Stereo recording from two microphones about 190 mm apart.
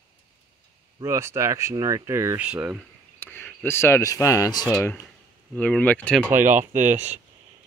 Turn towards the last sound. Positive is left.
turn(degrees=-40)  # may be behind; listen again after turning